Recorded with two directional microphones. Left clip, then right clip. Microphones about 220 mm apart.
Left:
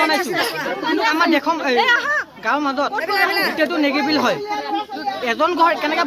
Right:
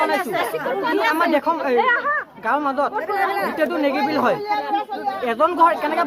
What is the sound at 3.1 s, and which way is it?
Speech, 35° left (ahead or behind).